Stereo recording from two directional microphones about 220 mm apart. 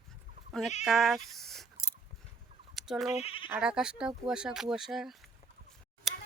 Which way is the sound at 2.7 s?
Centre (ahead or behind).